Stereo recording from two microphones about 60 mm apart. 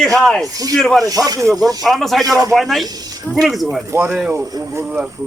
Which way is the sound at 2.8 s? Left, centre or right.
Right.